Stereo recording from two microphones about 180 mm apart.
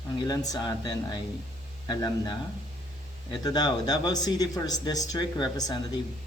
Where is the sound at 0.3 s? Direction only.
20° left (ahead or behind).